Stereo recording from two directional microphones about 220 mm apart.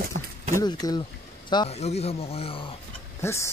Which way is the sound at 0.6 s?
15° left (ahead or behind).